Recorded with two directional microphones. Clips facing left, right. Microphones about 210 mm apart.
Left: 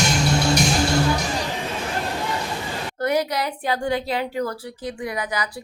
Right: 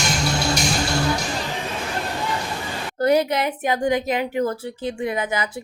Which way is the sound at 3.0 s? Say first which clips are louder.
Right 4 dB; 30° right (ahead or behind).